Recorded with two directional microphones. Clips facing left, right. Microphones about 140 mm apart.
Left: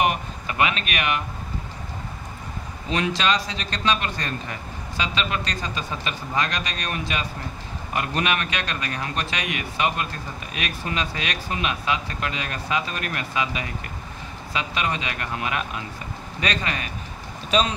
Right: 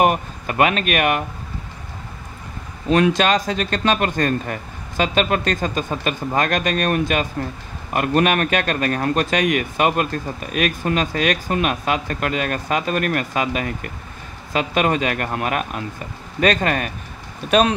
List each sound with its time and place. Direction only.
0.0 s speech: 45° right (ahead or behind)
2.9 s a man's voice: 50° right (ahead or behind)